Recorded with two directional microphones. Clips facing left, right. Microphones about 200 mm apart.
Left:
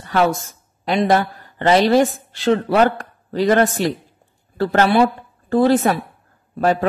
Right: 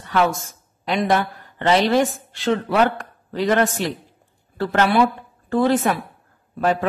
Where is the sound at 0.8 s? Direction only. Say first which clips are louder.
Left 3 dB; 35° left (ahead or behind).